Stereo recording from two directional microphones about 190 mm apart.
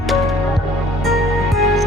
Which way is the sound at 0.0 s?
Centre (ahead or behind).